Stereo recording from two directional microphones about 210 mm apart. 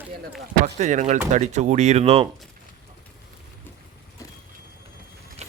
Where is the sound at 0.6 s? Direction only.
35° right (ahead or behind).